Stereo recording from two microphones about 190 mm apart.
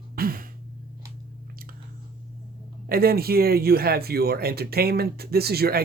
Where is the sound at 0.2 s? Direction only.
50° right (ahead or behind).